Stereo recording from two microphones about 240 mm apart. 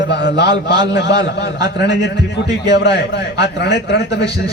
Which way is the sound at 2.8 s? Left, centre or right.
Left.